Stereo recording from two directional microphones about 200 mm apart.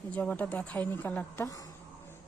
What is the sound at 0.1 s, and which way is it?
A woman's voice, 5° left (ahead or behind).